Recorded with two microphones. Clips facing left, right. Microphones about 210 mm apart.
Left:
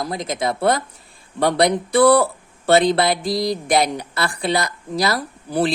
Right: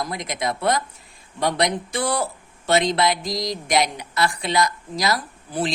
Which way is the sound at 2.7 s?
35° left (ahead or behind).